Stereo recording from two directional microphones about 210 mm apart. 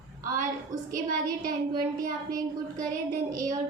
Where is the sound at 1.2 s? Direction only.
40° right (ahead or behind).